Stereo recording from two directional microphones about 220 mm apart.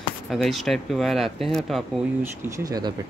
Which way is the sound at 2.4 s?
15° right (ahead or behind).